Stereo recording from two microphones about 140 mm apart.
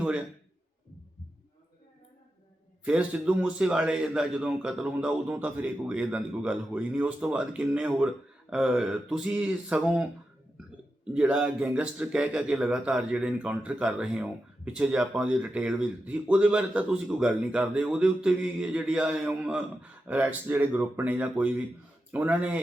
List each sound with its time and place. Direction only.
2.8 s a man's voice: 10° right (ahead or behind)
11.1 s a man's voice: 5° right (ahead or behind)